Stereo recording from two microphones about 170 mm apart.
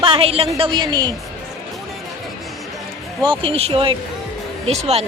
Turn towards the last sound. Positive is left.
turn(degrees=-40)  # may be behind; listen again after turning